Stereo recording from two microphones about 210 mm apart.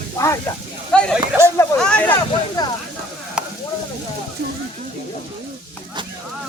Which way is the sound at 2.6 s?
20° left (ahead or behind).